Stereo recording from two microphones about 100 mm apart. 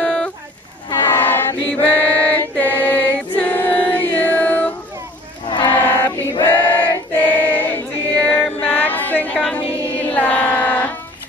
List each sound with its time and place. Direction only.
0.0 s a sound: 5° left (ahead or behind)
1.0 s chant: 20° left (ahead or behind)
3.3 s choir: 15° left (ahead or behind)
5.7 s choir: 30° left (ahead or behind)
6.4 s choir: 20° left (ahead or behind)
8.5 s music: 15° left (ahead or behind)
10.1 s carnatic music: 15° left (ahead or behind)